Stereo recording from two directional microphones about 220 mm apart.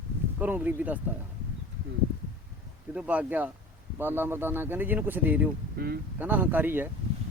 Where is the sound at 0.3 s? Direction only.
10° right (ahead or behind).